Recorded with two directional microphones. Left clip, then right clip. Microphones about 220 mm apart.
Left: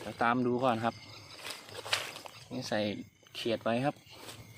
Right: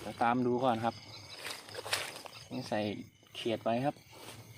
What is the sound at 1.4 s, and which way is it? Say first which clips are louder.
Walk: left 2 dB; 5° right (ahead or behind).